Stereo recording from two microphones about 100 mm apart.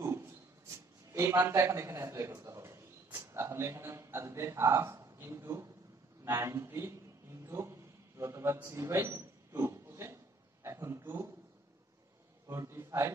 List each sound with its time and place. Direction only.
0.0 s a man's voice: 25° right (ahead or behind)
7.4 s a sound: 30° right (ahead or behind)
8.6 s pig: 30° right (ahead or behind)
12.4 s a man's voice: 25° right (ahead or behind)